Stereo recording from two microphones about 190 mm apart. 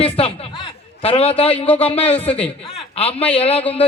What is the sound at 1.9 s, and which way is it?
A man's voice, 30° left (ahead or behind).